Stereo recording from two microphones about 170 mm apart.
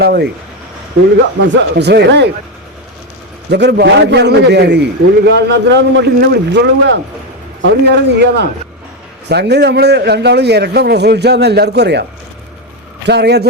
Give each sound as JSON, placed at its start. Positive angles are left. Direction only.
{"t": 0.0, "sound": "a man's voice", "side_deg": -75}
{"t": 1.4, "sound": "a man's voice", "side_deg": -80}
{"t": 3.5, "sound": "a man's voice", "side_deg": -85}
{"t": 13.1, "sound": "a man's voice", "side_deg": -80}